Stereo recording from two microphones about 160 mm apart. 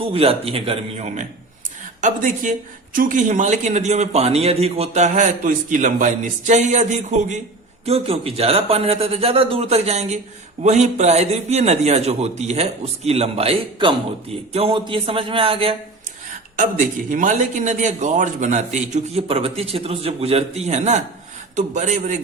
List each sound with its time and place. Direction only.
0.0 s a man's voice: 35° right (ahead or behind)
7.9 s a man's voice: 40° right (ahead or behind)
16.6 s speech: 55° right (ahead or behind)